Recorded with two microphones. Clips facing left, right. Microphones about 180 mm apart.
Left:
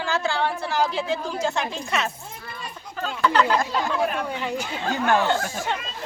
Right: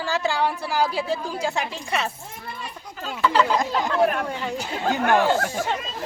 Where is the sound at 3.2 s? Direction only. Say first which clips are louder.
Even; centre (ahead or behind).